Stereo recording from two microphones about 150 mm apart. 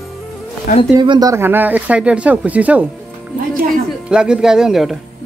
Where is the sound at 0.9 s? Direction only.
30° right (ahead or behind).